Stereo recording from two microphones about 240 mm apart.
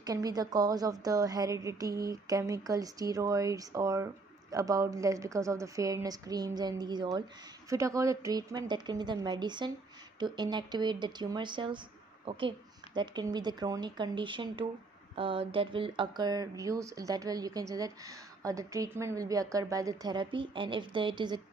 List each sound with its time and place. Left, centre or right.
0.0 s a woman's voice: centre